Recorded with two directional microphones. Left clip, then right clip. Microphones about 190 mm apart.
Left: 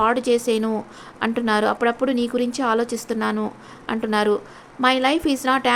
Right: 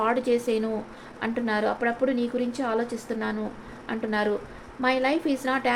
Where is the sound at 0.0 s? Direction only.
30° left (ahead or behind).